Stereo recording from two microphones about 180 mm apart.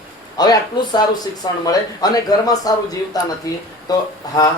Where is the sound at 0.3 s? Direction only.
20° left (ahead or behind).